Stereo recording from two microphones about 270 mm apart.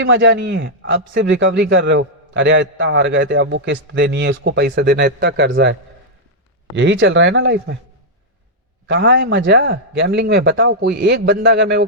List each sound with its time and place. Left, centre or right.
0.0 s a man's voice: right
6.7 s speech: right
8.9 s a man's voice: right